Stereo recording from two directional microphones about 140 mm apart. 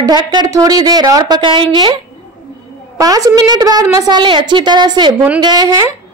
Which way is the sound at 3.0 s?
25° right (ahead or behind).